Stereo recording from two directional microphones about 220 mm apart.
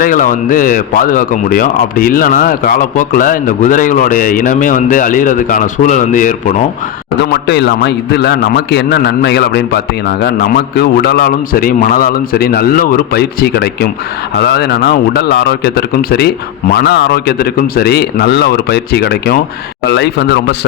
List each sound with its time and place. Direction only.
0.0 s speech: 40° left (ahead or behind)
7.2 s a man's voice: 50° left (ahead or behind)